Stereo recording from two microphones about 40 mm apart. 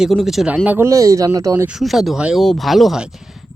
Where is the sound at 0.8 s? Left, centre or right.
Right.